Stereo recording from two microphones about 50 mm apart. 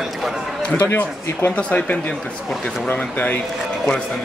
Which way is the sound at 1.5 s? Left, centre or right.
Left.